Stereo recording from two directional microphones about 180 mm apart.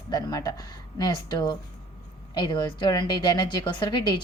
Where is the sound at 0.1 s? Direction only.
20° left (ahead or behind).